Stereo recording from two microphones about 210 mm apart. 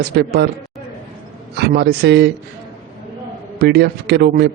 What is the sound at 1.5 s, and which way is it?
Speech, 55° right (ahead or behind).